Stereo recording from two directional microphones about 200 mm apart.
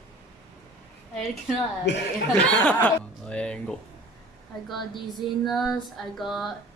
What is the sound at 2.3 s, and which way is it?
Speech, 5° left (ahead or behind).